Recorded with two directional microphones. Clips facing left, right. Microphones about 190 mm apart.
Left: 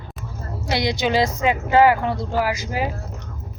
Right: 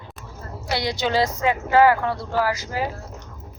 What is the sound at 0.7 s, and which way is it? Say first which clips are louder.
Speech: left 2 dB; 15° left (ahead or behind).